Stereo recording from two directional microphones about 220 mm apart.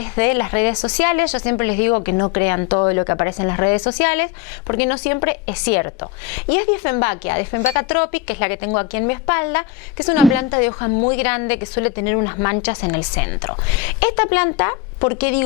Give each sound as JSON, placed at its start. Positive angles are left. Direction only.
{"t": 0.0, "sound": "a woman's voice", "side_deg": 15}